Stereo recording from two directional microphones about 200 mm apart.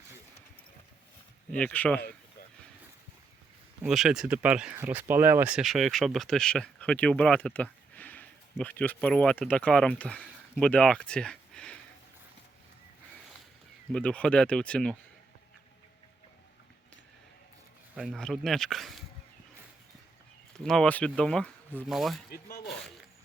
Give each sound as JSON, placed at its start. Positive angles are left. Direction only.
{"t": 1.5, "sound": "speech", "side_deg": 5}
{"t": 3.8, "sound": "speech", "side_deg": 0}
{"t": 13.9, "sound": "speech", "side_deg": 5}
{"t": 17.9, "sound": "speech", "side_deg": 0}
{"t": 20.7, "sound": "speech", "side_deg": 5}
{"t": 22.3, "sound": "speech", "side_deg": 50}
{"t": 22.6, "sound": "speech", "side_deg": 0}